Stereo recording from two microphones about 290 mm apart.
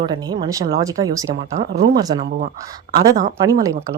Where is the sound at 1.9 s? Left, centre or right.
Centre.